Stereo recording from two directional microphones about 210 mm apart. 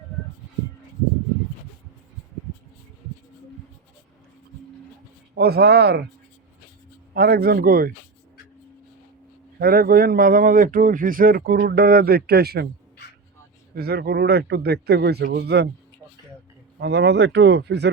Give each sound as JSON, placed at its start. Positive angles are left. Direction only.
{"t": 5.3, "sound": "a man's voice", "side_deg": -50}
{"t": 7.1, "sound": "a man's voice", "side_deg": -45}
{"t": 9.6, "sound": "a man's voice", "side_deg": -45}
{"t": 13.7, "sound": "a man's voice", "side_deg": -50}
{"t": 16.8, "sound": "a man's voice", "side_deg": -55}